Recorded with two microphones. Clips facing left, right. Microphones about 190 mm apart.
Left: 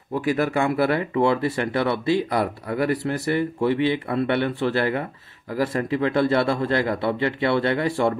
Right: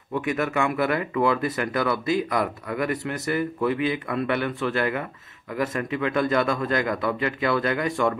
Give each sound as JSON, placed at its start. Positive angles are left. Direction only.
{"t": 0.1, "sound": "speech", "side_deg": 30}